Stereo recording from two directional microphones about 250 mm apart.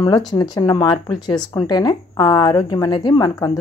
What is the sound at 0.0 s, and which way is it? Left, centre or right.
A woman's voice, centre.